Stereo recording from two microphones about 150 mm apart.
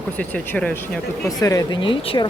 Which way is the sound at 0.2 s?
10° left (ahead or behind).